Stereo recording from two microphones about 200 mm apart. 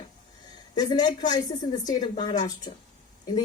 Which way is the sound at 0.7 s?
20° left (ahead or behind).